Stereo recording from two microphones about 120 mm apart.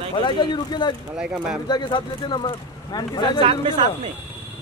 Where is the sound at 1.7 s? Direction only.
40° left (ahead or behind).